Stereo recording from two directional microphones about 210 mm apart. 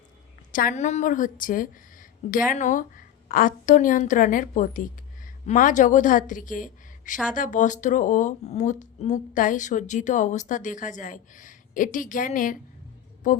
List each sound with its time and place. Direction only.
0.5 s a woman's voice: 40° left (ahead or behind)